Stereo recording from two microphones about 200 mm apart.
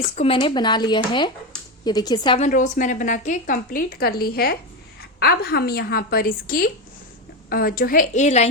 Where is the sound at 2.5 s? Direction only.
40° left (ahead or behind).